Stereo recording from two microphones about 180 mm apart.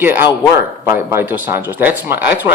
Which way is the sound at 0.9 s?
10° right (ahead or behind).